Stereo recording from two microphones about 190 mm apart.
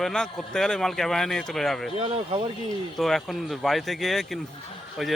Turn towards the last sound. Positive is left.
turn(degrees=0)  # may be behind; listen again after turning